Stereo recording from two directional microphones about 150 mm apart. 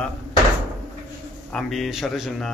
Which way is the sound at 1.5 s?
Centre (ahead or behind).